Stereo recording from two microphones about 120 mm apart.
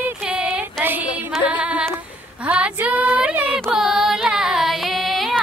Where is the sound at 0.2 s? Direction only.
10° right (ahead or behind).